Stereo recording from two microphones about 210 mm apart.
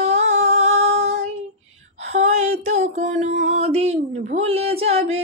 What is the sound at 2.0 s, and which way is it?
Music, 30° right (ahead or behind).